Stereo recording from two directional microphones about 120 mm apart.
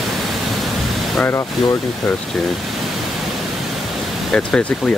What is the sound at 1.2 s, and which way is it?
Speech, 20° left (ahead or behind).